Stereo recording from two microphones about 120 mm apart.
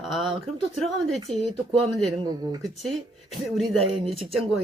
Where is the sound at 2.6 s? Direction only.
Centre (ahead or behind).